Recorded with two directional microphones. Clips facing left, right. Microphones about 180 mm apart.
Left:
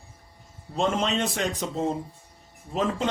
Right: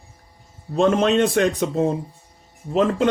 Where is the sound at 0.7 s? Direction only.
60° right (ahead or behind).